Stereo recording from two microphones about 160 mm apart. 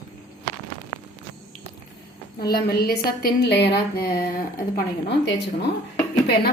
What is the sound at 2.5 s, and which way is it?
A woman's voice, 75° left (ahead or behind).